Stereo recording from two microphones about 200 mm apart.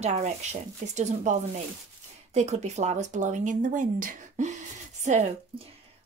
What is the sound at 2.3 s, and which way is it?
Speech, 35° right (ahead or behind).